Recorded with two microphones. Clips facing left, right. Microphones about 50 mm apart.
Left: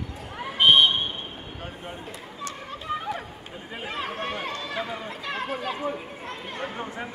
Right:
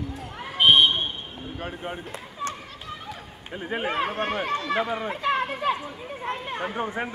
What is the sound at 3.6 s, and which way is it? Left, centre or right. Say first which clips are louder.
Speech: right 7 dB; right.